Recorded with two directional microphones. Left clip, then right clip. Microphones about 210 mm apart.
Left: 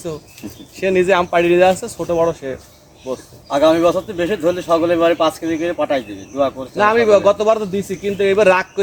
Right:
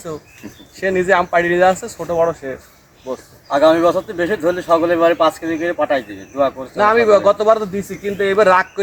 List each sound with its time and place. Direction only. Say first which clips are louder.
0.8 s speech: even; 15° left (ahead or behind)
3.5 s speech: right 1 dB; 5° left (ahead or behind)
6.7 s speech: even; 10° left (ahead or behind)